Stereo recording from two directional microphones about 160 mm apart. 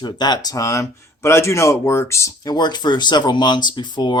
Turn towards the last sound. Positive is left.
turn(degrees=30)  # may be behind; listen again after turning